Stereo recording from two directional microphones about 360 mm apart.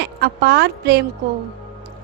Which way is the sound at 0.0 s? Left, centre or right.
Right.